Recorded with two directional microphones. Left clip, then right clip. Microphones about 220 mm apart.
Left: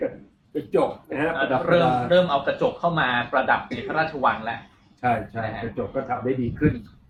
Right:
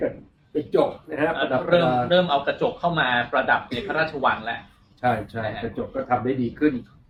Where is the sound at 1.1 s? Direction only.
20° right (ahead or behind).